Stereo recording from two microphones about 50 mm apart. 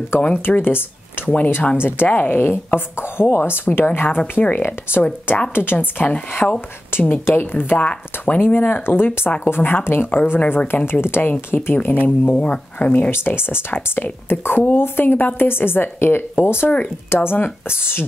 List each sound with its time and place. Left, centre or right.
0.2 s speech: left
0.6 s speech: left
1.5 s speech: left
1.8 s speech: left
6.4 s speech: left
6.9 s speech: left
7.2 s speech: left
7.8 s speech: left
8.4 s speech: left
13.1 s speech: left